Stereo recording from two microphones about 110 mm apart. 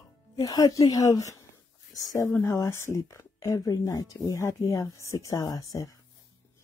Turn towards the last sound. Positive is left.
turn(degrees=30)  # may be behind; listen again after turning